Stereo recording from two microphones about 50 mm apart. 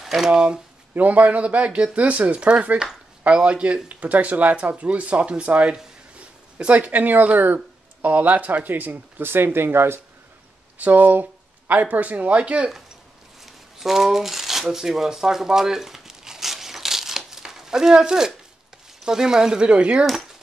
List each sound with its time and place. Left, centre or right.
0.0 s speech: centre
0.9 s speech: right
10.8 s speech: right
13.4 s shuffling cards: centre
19.0 s speech: centre